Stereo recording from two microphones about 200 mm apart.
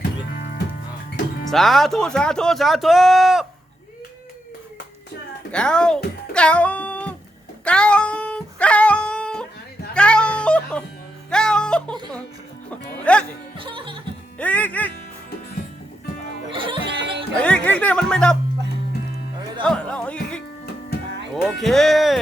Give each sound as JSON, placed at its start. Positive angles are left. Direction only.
{"t": 1.5, "sound": "speech", "side_deg": 0}
{"t": 5.5, "sound": "speech", "side_deg": 5}
{"t": 6.3, "sound": "a sound", "side_deg": 5}
{"t": 7.6, "sound": "music", "side_deg": 5}
{"t": 12.7, "sound": "speech", "side_deg": 5}
{"t": 13.6, "sound": "music", "side_deg": -25}
{"t": 14.3, "sound": "speech", "side_deg": 5}
{"t": 16.5, "sound": "music", "side_deg": -25}
{"t": 16.9, "sound": "music", "side_deg": -60}
{"t": 17.4, "sound": "speech", "side_deg": 5}
{"t": 19.6, "sound": "music", "side_deg": 5}
{"t": 21.6, "sound": "speech", "side_deg": 0}